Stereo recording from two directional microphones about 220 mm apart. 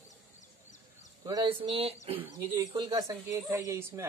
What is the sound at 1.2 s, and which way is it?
Speech, 20° right (ahead or behind).